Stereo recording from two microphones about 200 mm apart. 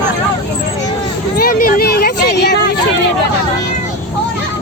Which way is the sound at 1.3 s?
50° left (ahead or behind).